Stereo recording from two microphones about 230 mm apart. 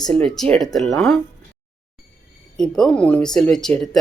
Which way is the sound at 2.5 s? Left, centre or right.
Centre.